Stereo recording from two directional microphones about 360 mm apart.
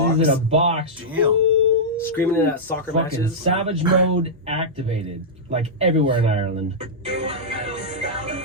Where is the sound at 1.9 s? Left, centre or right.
Centre.